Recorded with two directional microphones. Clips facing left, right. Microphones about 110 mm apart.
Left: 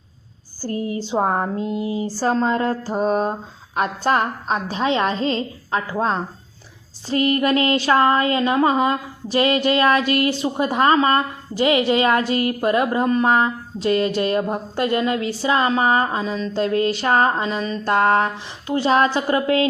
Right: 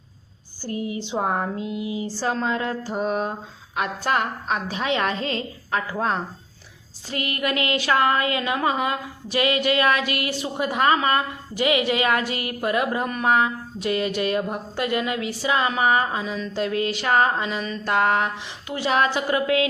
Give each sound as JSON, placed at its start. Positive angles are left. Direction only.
{"t": 0.6, "sound": "speech", "side_deg": 40}